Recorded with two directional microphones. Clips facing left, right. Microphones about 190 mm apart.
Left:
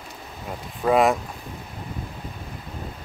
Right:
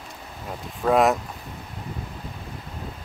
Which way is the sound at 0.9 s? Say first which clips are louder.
Even; centre (ahead or behind).